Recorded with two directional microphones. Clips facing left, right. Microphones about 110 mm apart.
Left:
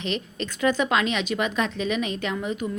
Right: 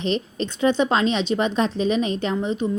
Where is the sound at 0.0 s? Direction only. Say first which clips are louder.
Right 5 dB; 35° right (ahead or behind).